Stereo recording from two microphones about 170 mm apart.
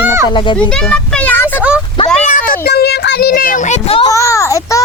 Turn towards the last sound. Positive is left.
turn(degrees=20)  # may be behind; listen again after turning